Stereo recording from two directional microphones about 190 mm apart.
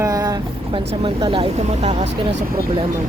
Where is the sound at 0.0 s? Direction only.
20° right (ahead or behind).